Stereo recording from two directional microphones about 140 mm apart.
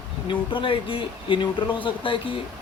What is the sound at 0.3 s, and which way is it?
Speech, 35° left (ahead or behind).